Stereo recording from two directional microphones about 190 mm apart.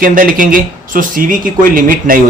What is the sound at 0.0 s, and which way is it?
Speech, 45° right (ahead or behind).